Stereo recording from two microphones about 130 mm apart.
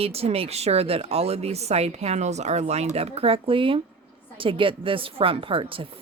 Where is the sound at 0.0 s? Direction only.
50° right (ahead or behind).